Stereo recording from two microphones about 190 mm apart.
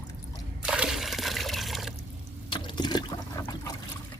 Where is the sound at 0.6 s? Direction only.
5° right (ahead or behind).